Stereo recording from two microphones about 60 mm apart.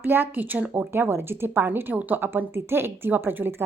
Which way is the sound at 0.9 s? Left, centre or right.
Right.